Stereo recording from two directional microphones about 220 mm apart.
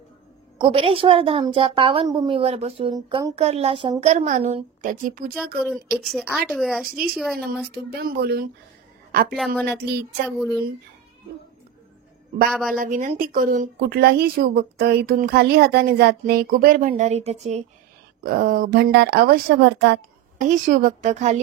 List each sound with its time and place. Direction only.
0.6 s a woman's voice: 25° right (ahead or behind)
5.3 s a woman's voice: centre (ahead or behind)
7.4 s a woman's voice: 45° right (ahead or behind)
9.3 s a woman's voice: centre (ahead or behind)
12.4 s a woman's voice: centre (ahead or behind)
12.7 s a woman's voice: 35° right (ahead or behind); by 20.0 s 50° right (ahead or behind)
20.3 s a woman's voice: 35° right (ahead or behind)